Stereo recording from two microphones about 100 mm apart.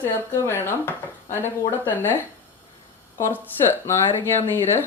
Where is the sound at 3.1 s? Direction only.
25° left (ahead or behind).